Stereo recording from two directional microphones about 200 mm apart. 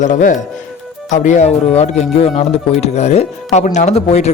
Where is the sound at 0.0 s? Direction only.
40° left (ahead or behind).